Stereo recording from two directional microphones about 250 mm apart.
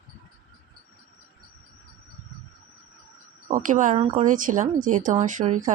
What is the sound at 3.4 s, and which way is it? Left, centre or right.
Speech, right.